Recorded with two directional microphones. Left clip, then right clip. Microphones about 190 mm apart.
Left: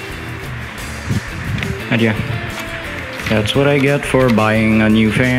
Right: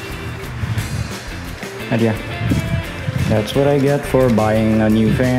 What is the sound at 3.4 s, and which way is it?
Speech, 15° left (ahead or behind).